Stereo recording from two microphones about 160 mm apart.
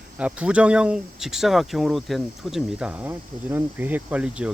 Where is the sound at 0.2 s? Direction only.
10° right (ahead or behind).